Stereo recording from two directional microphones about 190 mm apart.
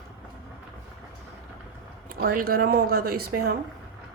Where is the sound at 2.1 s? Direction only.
50° right (ahead or behind).